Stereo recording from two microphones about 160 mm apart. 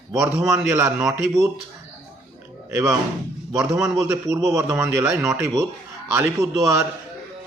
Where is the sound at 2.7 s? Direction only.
20° right (ahead or behind).